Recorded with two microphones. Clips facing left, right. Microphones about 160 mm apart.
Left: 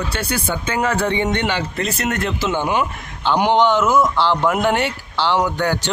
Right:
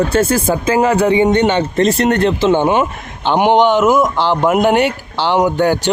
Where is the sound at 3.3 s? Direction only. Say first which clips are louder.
Right 4 dB; 20° right (ahead or behind).